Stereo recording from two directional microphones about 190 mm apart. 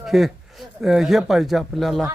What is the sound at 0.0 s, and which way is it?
A man's voice, centre (ahead or behind).